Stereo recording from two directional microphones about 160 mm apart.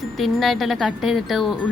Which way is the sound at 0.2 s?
Centre (ahead or behind).